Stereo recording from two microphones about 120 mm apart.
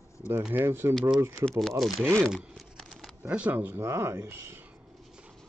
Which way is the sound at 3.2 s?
15° right (ahead or behind).